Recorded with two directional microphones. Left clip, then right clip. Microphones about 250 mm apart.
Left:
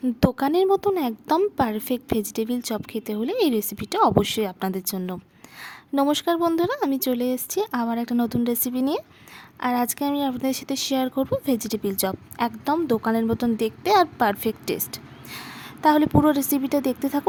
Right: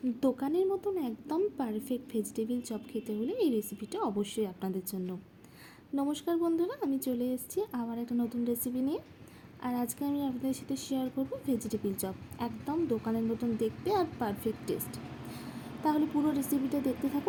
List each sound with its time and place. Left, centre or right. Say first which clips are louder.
0.2 s speech: left 9 dB; left
5.9 s speech: left 11 dB; left
16.6 s a woman's voice: left 10 dB; left